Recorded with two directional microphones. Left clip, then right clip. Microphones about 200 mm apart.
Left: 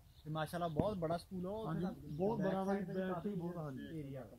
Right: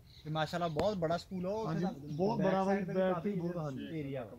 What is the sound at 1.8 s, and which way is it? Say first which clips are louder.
Speech: right 5 dB; 50° right (ahead or behind).